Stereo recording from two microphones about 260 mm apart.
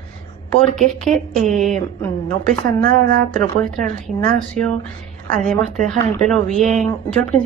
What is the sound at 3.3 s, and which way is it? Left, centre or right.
A woman's voice, centre.